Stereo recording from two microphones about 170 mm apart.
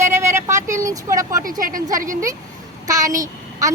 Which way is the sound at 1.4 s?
55° right (ahead or behind).